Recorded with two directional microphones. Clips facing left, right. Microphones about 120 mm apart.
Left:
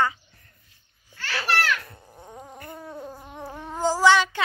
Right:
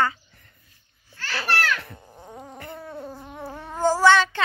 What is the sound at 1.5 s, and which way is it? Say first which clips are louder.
Speech: even; 10° left (ahead or behind).